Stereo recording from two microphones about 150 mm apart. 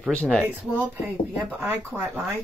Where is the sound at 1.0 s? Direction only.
15° right (ahead or behind).